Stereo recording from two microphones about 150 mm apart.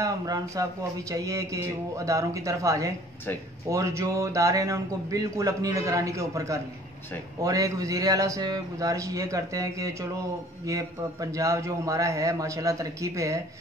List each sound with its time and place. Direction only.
0.0 s speech: 25° right (ahead or behind)